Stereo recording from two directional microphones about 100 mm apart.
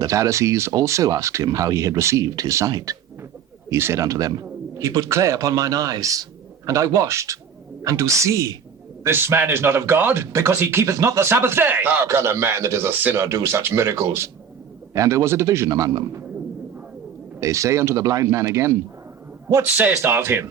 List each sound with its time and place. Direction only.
0.0 s a man's voice: 30° right (ahead or behind)
3.7 s a man's voice: 25° right (ahead or behind)
17.4 s a man's voice: 30° right (ahead or behind)
20.0 s speech: 25° right (ahead or behind)